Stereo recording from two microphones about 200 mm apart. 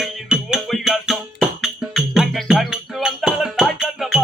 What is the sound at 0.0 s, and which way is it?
Music, centre (ahead or behind).